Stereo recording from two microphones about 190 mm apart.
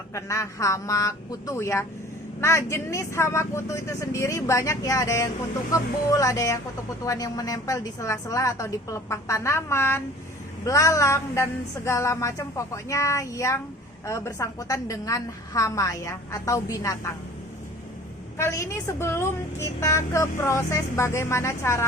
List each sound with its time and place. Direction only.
0.1 s a woman's voice: 15° left (ahead or behind)
18.3 s a woman's voice: 15° left (ahead or behind)